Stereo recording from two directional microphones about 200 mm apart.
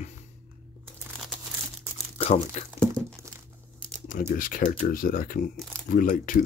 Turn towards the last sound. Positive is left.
turn(degrees=40)  # may be behind; listen again after turning